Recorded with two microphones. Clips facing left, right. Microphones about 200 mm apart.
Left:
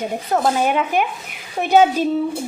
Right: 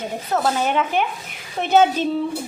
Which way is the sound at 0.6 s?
10° left (ahead or behind).